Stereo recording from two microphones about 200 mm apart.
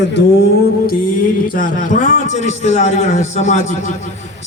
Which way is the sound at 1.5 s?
40° left (ahead or behind).